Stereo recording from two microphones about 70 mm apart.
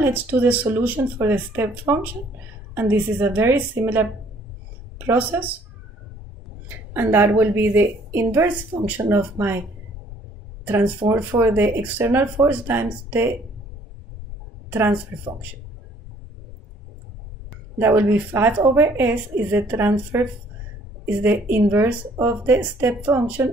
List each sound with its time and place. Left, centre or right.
0.0 s a woman's voice: right
6.9 s a woman's voice: right
10.6 s a sound: right
11.1 s a woman's voice: right
14.7 s a woman's voice: right
17.7 s a woman's voice: right